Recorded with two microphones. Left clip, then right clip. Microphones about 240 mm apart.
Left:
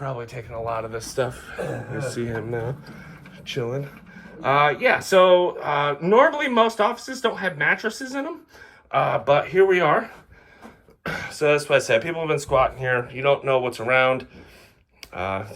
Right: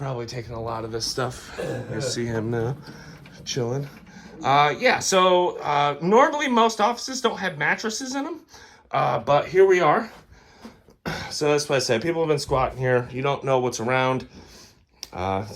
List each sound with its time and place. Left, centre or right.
0.0 s speech: right; by 2.4 s centre
3.4 s speech: centre
11.0 s music: centre
11.9 s speech: right